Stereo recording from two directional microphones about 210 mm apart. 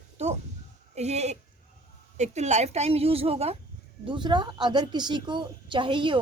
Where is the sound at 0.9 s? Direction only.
30° right (ahead or behind).